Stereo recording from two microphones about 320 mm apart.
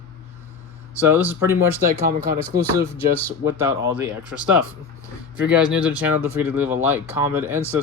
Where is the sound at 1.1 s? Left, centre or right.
Centre.